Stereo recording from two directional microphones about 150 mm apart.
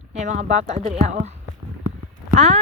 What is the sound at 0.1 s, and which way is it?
Speech, 50° right (ahead or behind).